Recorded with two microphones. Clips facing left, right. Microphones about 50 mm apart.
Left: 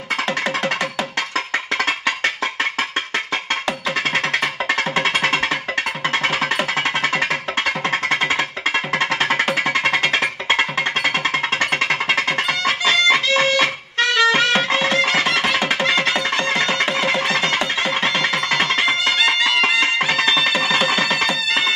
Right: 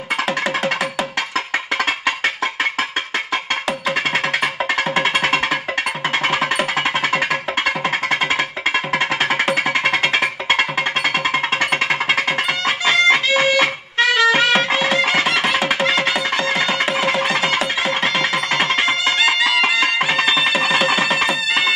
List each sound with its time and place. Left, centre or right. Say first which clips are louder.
4.6 s music: right 1 dB; centre